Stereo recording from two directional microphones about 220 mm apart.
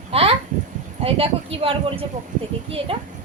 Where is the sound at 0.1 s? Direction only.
25° right (ahead or behind).